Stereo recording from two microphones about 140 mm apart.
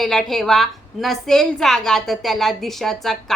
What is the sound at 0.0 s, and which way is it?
A woman's voice, centre (ahead or behind).